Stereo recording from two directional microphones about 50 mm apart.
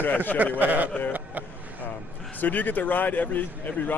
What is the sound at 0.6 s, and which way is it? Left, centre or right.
Speech, right.